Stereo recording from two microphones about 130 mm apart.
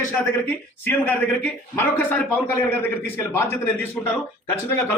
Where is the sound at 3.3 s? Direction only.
20° left (ahead or behind).